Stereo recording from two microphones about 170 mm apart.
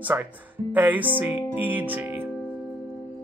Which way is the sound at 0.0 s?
10° right (ahead or behind).